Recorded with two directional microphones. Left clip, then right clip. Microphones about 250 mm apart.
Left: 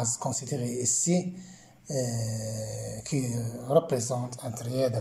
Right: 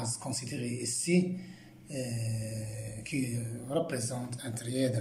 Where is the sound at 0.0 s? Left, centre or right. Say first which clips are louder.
Left 6 dB; centre.